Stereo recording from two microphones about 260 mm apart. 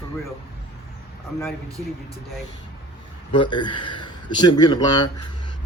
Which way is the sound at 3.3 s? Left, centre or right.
Centre.